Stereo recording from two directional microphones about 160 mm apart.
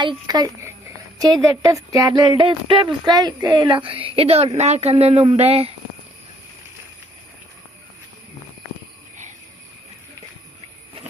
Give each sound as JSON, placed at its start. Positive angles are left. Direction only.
{"t": 0.0, "sound": "a woman's voice", "side_deg": -25}